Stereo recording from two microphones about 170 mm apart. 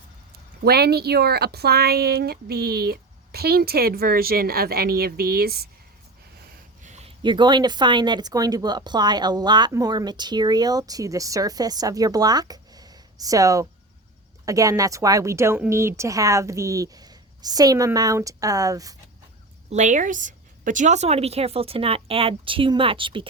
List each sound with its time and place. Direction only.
0.6 s speech: 70° right (ahead or behind)
6.8 s a sound: 40° right (ahead or behind)
7.2 s speech: 25° right (ahead or behind)
19.7 s a woman's voice: 45° right (ahead or behind); by 23.3 s 30° right (ahead or behind)